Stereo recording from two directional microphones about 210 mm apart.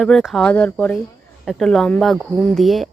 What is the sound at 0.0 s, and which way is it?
Speech, centre (ahead or behind).